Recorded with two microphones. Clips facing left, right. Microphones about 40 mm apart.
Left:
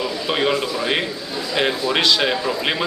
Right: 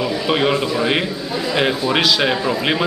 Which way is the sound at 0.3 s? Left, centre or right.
Centre.